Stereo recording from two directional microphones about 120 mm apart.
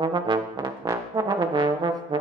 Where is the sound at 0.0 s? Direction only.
40° right (ahead or behind).